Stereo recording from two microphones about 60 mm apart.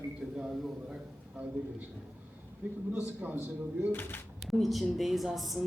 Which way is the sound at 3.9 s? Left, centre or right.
Left.